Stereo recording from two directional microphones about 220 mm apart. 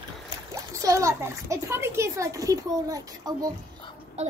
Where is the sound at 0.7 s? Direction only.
15° right (ahead or behind).